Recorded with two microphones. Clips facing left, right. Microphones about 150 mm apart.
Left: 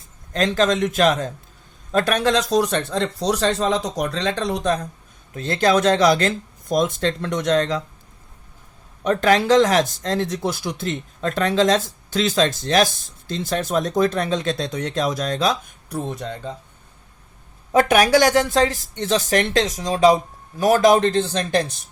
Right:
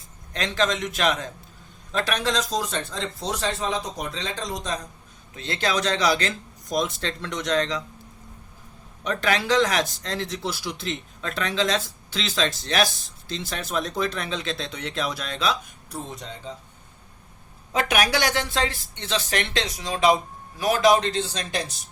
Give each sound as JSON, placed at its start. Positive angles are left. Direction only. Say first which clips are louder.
{"t": 0.3, "sound": "speech", "louder": "left 6 dB", "side_deg": 40}
{"t": 5.3, "sound": "speech", "louder": "left 8 dB", "side_deg": 45}
{"t": 9.0, "sound": "speech", "louder": "left 7 dB", "side_deg": 45}
{"t": 17.7, "sound": "speech", "louder": "left 8 dB", "side_deg": 50}